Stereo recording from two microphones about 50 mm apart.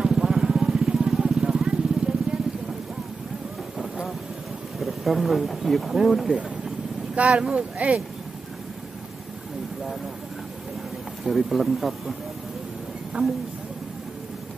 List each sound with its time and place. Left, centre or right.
0.0 s vehicle: centre
4.7 s speech: centre
7.2 s speech: right
11.2 s speech: centre
13.1 s speech: right